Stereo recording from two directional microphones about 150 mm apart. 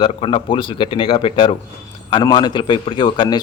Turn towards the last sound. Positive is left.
turn(degrees=30)  # may be behind; listen again after turning